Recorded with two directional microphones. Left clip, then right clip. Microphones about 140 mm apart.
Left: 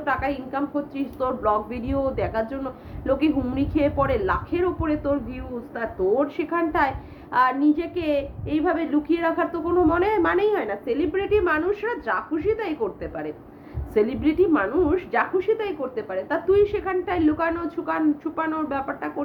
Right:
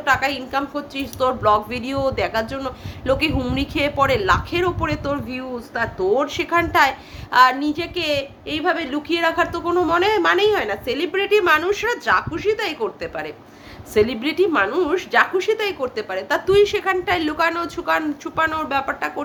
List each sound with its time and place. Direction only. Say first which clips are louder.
0.0 s a woman's voice: right 6 dB; 20° right (ahead or behind)